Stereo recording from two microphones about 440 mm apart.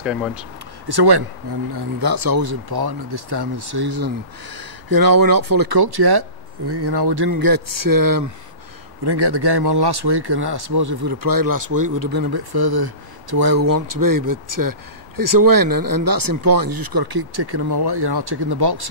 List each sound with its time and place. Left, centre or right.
0.0 s speech: centre
0.8 s speech: right
9.0 s speech: right